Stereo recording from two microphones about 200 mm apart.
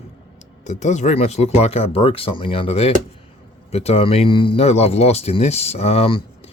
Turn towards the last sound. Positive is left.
turn(degrees=30)  # may be behind; listen again after turning